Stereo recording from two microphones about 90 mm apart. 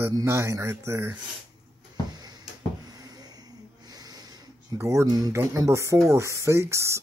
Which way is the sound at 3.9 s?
45° right (ahead or behind).